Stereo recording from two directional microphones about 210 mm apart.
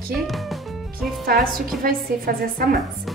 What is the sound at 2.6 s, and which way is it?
Speech, 45° right (ahead or behind).